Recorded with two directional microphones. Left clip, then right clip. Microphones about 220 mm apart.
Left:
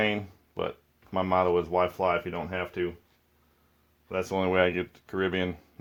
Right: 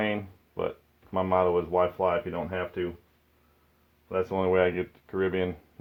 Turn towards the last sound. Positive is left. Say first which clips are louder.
# right 1 dB
turn(degrees=40)  # may be behind; listen again after turning